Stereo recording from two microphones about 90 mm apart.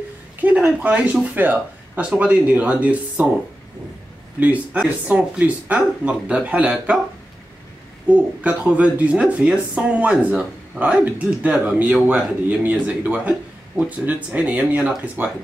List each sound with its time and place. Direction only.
0.4 s speech: 15° right (ahead or behind)
4.4 s speech: 15° right (ahead or behind)
8.1 s speech: 15° right (ahead or behind)